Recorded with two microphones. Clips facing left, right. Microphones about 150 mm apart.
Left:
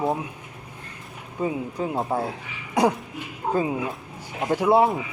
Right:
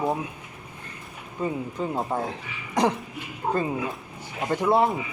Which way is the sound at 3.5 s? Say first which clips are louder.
Left 3 dB; 10° left (ahead or behind).